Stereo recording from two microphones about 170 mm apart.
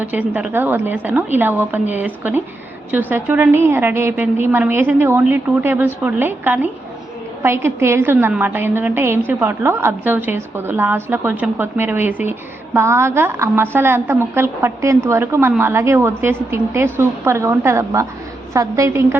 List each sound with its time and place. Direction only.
0.0 s a woman's voice: 10° right (ahead or behind)